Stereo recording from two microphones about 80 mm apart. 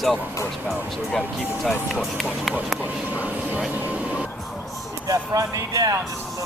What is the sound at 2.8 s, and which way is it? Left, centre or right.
Speech, centre.